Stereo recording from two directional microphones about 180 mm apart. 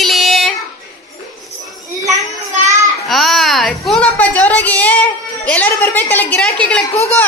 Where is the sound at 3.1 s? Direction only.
Centre (ahead or behind).